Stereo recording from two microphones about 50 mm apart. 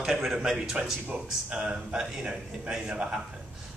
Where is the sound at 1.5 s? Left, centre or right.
Right.